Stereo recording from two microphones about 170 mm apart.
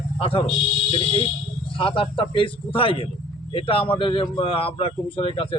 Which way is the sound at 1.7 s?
30° left (ahead or behind).